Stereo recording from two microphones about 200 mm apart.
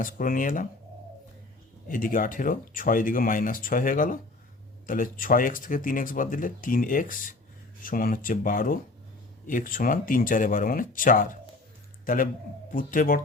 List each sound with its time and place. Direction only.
0.0 s speech: 45° left (ahead or behind)
1.9 s speech: 45° left (ahead or behind)